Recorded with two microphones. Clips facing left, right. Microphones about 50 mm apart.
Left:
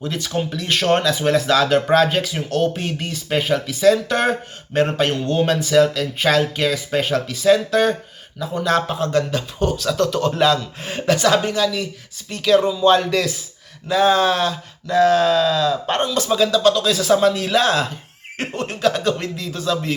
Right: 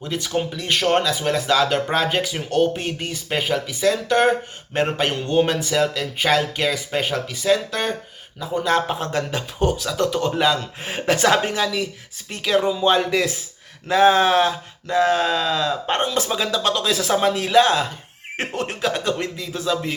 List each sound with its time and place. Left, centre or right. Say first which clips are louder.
0.1 s speech: right 2 dB; centre
4.7 s speech: left 3 dB; centre
13.8 s speech: right 1 dB; right
16.0 s speech: left 1 dB; right
16.3 s speech: left 6 dB; centre
17.4 s speech: right 1 dB; centre
18.3 s speech: even; right
18.8 s speech: left 5 dB; centre